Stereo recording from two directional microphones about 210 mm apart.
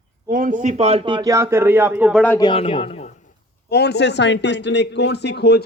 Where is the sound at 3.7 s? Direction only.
55° left (ahead or behind).